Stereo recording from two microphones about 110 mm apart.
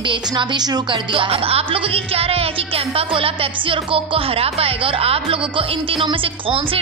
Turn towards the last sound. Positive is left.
turn(degrees=-55)  # may be behind; listen again after turning